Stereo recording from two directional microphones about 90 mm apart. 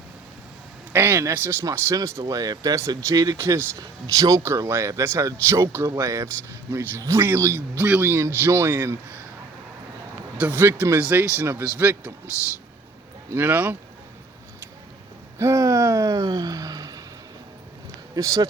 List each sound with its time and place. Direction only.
0.9 s speech: 25° right (ahead or behind)
3.3 s speech: 25° right (ahead or behind)
3.8 s speech: 40° right (ahead or behind)
10.3 s speech: 20° right (ahead or behind)
13.3 s speech: 25° right (ahead or behind)
15.4 s speech: 35° right (ahead or behind)
18.1 s speech: 40° right (ahead or behind)